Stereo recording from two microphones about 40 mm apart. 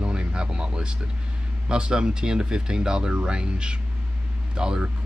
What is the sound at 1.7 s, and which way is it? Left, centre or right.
Speech, right.